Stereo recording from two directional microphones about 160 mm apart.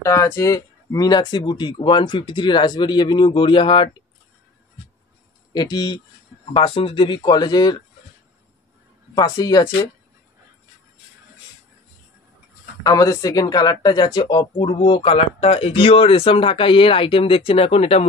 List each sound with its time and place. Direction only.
0.0 s speech: 20° left (ahead or behind)
5.5 s speech: 25° left (ahead or behind)
9.1 s speech: 20° left (ahead or behind)
12.8 s speech: 20° left (ahead or behind); by 18.0 s 40° left (ahead or behind)